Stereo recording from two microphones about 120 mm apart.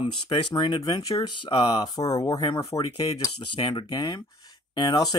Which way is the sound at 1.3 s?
40° left (ahead or behind).